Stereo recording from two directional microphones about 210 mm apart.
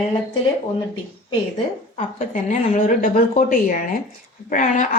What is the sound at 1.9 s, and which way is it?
A woman's voice, 35° left (ahead or behind).